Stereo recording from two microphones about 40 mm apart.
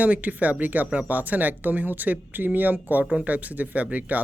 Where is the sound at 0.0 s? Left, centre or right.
Right.